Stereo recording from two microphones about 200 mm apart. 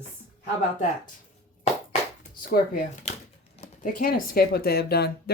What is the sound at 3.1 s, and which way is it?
Speech, 35° left (ahead or behind).